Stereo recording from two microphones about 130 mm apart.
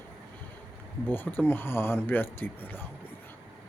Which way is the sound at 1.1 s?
15° left (ahead or behind).